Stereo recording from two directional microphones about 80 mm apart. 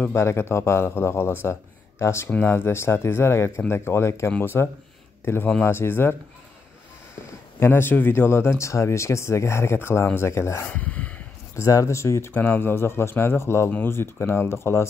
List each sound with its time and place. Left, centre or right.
0.0 s speech: left
7.6 s speech: left
10.7 s a sound: centre
11.5 s speech: left